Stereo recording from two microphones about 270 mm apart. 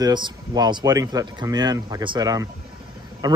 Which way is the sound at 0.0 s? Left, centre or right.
Centre.